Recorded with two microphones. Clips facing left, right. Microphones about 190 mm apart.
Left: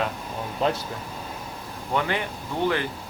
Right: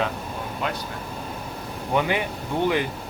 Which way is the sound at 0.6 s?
35° left (ahead or behind).